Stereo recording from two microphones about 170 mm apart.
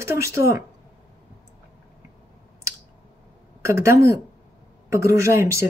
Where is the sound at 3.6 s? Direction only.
15° right (ahead or behind).